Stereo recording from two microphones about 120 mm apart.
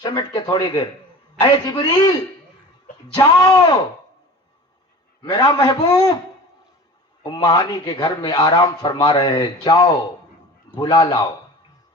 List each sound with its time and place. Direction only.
0.0 s speech: 35° left (ahead or behind)
3.2 s speech: 30° left (ahead or behind)
5.3 s speech: 40° left (ahead or behind)
7.2 s speech: 35° left (ahead or behind)